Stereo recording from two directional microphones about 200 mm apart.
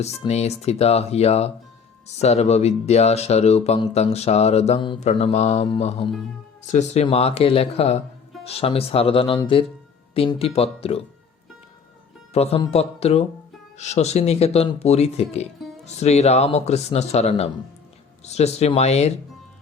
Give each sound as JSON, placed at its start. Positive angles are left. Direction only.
{"t": 0.0, "sound": "speech", "side_deg": 35}
{"t": 12.3, "sound": "speech", "side_deg": 30}